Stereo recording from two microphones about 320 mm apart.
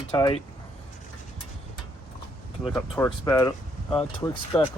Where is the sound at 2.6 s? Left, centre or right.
Centre.